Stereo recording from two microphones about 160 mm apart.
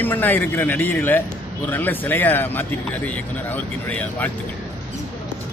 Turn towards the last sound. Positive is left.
turn(degrees=10)  # may be behind; listen again after turning